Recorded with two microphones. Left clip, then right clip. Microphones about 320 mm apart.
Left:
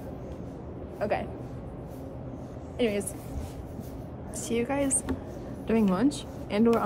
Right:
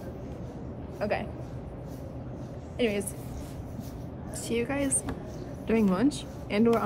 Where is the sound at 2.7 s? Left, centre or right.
Centre.